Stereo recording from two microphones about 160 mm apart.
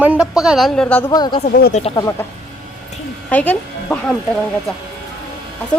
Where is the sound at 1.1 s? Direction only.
25° left (ahead or behind).